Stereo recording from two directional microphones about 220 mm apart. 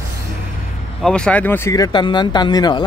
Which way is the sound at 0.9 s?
5° left (ahead or behind).